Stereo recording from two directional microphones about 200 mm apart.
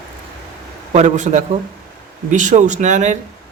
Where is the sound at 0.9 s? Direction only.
35° right (ahead or behind).